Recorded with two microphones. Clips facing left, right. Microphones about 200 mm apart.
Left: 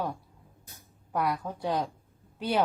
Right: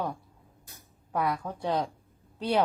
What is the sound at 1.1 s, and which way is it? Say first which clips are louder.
Speech: even; centre (ahead or behind).